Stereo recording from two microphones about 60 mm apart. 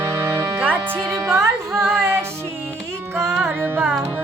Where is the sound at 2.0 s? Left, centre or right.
Right.